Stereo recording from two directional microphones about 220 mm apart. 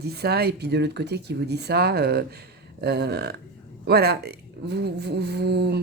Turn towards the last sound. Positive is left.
turn(degrees=-50)  # may be behind; listen again after turning